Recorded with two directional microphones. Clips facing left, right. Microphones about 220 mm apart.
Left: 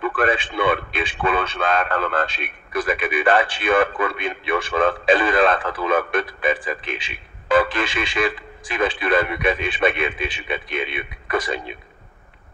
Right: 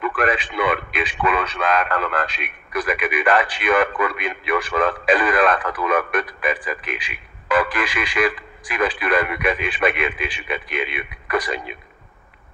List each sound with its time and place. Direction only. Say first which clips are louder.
0.0 s a man's voice: left 1 dB; 30° left (ahead or behind)